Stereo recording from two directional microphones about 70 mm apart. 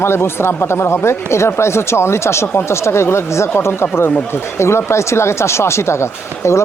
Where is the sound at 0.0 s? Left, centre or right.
Left.